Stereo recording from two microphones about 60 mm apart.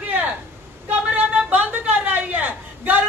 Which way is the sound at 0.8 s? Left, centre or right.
Right.